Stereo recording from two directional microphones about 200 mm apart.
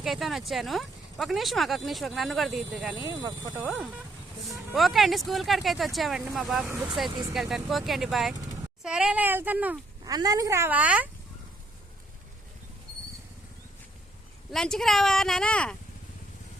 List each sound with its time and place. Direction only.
0.0 s speech: centre (ahead or behind)
2.9 s speech: 20° right (ahead or behind)
4.4 s speech: centre (ahead or behind)
10.0 s speech: 20° right (ahead or behind)
14.5 s speech: 5° left (ahead or behind)